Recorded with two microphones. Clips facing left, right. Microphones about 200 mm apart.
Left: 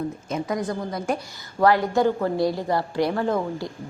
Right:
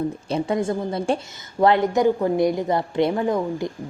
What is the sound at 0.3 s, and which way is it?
A woman's voice, 30° right (ahead or behind).